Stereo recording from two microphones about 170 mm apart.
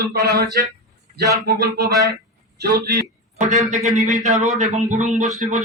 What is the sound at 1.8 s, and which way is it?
Speech, 20° right (ahead or behind).